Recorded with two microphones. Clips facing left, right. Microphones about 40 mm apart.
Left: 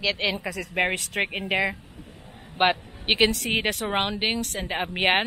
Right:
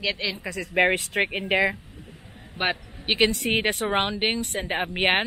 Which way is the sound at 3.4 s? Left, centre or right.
Centre.